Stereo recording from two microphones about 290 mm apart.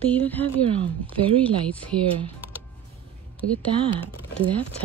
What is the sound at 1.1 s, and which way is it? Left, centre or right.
Speech, centre.